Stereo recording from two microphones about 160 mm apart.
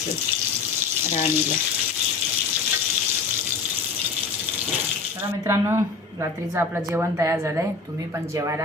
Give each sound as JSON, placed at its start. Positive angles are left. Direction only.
{"t": 5.5, "sound": "a woman's voice", "side_deg": -15}